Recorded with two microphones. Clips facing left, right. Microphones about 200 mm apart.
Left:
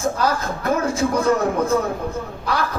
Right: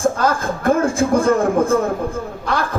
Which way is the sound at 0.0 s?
50° right (ahead or behind).